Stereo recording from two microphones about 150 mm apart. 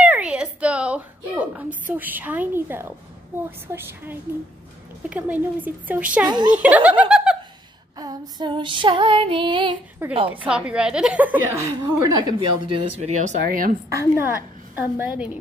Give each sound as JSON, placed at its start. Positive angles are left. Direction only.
{"t": 0.0, "sound": "a sound", "side_deg": -5}
{"t": 1.9, "sound": "a woman's voice", "side_deg": -10}
{"t": 6.2, "sound": "a woman's voice", "side_deg": -30}
{"t": 6.5, "sound": "speech", "side_deg": -10}
{"t": 8.0, "sound": "female singing", "side_deg": -25}
{"t": 10.0, "sound": "a woman's voice", "side_deg": -15}
{"t": 13.2, "sound": "speech", "side_deg": -65}
{"t": 13.8, "sound": "a woman's voice", "side_deg": -20}